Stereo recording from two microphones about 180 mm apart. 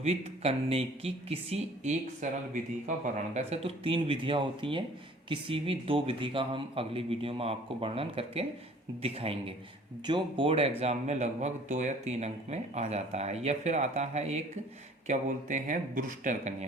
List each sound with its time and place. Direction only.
0.0 s speech: 35° right (ahead or behind)